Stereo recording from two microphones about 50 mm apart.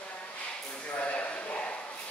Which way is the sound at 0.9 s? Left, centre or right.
Left.